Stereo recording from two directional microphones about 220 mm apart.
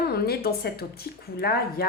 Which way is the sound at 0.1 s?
45° left (ahead or behind).